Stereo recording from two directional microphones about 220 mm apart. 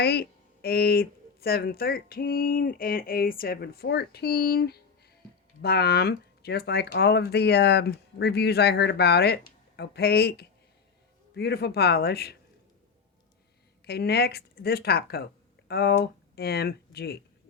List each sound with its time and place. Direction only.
0.0 s speech: 45° left (ahead or behind)
13.8 s speech: 45° left (ahead or behind)